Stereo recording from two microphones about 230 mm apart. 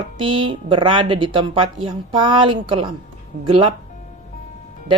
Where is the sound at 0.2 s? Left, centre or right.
Right.